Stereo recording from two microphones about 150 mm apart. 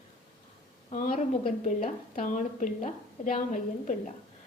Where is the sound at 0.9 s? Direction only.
65° left (ahead or behind).